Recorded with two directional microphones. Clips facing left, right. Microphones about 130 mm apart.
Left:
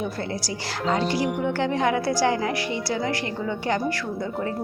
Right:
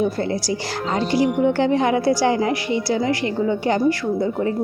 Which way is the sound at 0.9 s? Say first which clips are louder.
Right 8 dB; 25° right (ahead or behind).